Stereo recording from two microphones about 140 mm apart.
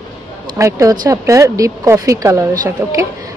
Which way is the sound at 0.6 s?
25° right (ahead or behind).